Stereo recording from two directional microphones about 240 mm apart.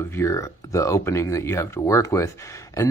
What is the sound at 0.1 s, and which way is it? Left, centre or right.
Speech, centre.